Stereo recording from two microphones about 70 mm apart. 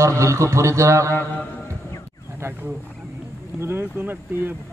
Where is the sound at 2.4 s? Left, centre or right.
Right.